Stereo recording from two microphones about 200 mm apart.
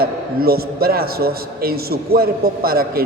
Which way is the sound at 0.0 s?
50° right (ahead or behind).